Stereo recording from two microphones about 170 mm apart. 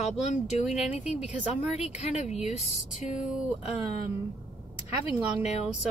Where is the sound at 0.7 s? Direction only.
5° right (ahead or behind).